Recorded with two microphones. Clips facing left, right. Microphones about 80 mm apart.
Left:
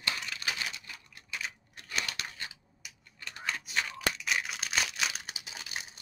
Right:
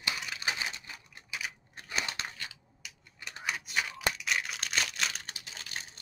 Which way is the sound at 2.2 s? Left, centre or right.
Right.